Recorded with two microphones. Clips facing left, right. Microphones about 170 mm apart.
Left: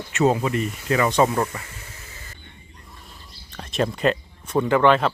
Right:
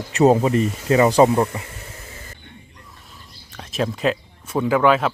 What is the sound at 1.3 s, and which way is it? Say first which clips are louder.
Speech: right 5 dB; 20° right (ahead or behind).